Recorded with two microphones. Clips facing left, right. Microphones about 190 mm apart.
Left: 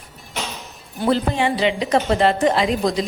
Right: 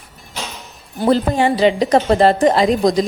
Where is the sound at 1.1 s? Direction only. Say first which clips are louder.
Right 4 dB; 40° right (ahead or behind).